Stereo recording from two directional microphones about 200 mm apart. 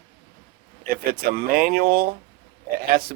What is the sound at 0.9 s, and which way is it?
Speech, 45° right (ahead or behind).